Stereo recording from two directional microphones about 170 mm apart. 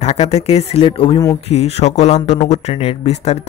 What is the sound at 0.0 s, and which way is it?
Speech, 40° left (ahead or behind).